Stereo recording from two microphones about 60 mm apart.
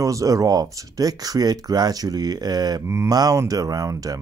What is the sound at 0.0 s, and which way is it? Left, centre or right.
Speech, right.